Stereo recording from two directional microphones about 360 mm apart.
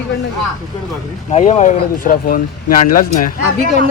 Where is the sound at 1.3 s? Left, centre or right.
Centre.